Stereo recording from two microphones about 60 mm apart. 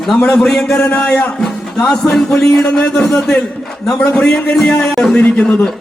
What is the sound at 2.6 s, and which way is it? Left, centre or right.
Speech, left.